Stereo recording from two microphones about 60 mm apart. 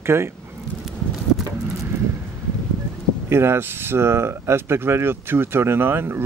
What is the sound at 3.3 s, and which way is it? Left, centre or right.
Speech, right.